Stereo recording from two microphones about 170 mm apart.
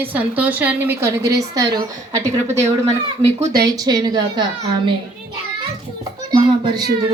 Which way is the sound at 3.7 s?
25° right (ahead or behind).